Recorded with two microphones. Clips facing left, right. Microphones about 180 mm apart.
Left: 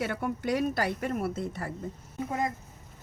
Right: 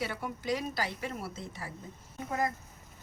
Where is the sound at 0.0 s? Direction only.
55° left (ahead or behind).